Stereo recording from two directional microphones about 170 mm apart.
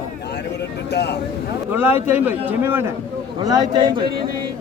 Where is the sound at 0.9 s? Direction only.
75° left (ahead or behind).